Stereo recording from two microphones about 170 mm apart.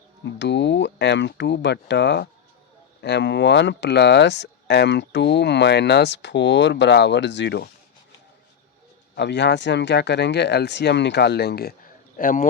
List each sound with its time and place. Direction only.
0.3 s speech: 90° left
9.1 s speech: 90° left; by 11.7 s 70° left (ahead or behind)
12.1 s speech: 55° left (ahead or behind)